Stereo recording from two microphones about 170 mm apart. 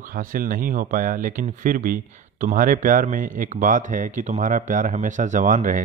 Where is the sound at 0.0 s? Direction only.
55° right (ahead or behind).